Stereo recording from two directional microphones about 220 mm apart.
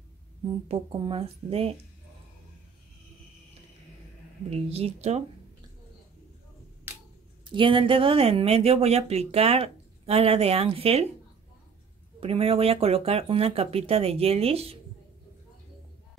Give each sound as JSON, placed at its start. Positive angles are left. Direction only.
{"t": 0.7, "sound": "speech", "side_deg": -25}
{"t": 4.5, "sound": "speech", "side_deg": -25}
{"t": 7.4, "sound": "speech", "side_deg": -20}
{"t": 12.2, "sound": "speech", "side_deg": -25}